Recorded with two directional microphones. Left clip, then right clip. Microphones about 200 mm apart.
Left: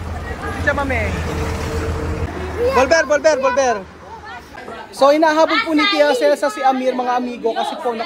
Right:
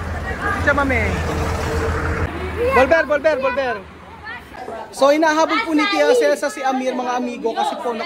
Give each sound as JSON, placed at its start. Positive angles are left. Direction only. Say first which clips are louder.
{"t": 0.4, "sound": "speech", "louder": "right 2 dB", "side_deg": 0}
{"t": 2.8, "sound": "speech", "louder": "left 2 dB", "side_deg": 25}
{"t": 5.0, "sound": "a man's voice", "louder": "left 2 dB", "side_deg": -10}